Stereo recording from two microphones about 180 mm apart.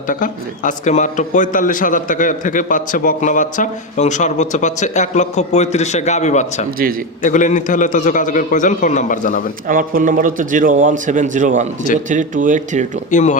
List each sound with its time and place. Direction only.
0.1 s a man's voice: 45° left (ahead or behind)
9.6 s speech: 50° right (ahead or behind)
13.1 s a man's voice: 45° left (ahead or behind)